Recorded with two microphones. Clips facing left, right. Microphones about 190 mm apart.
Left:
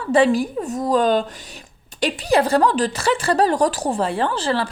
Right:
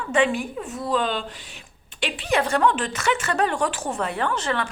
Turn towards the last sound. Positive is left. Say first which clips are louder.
# left 4 dB
turn(degrees=30)  # may be behind; listen again after turning